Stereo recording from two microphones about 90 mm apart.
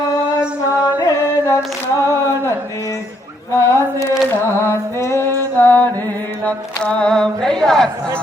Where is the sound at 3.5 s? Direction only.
30° left (ahead or behind).